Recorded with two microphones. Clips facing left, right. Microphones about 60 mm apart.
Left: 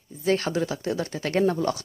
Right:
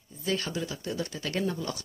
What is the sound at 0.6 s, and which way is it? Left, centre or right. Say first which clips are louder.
Speech: left 7 dB; left.